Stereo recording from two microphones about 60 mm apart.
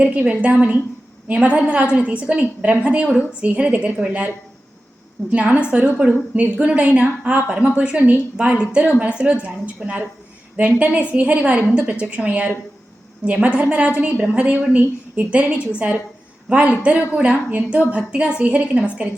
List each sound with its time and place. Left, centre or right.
0.0 s a woman's voice: right
5.3 s a woman's voice: right